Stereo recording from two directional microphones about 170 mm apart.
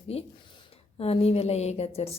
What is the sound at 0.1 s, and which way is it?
A woman's voice, 35° left (ahead or behind).